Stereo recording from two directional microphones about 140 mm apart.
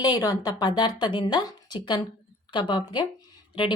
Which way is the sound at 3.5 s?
35° left (ahead or behind).